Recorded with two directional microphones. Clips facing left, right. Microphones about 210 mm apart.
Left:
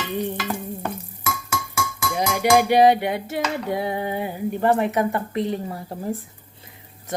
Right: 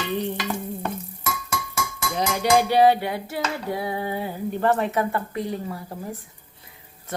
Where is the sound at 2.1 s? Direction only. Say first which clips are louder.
Left 2 dB; 10° left (ahead or behind).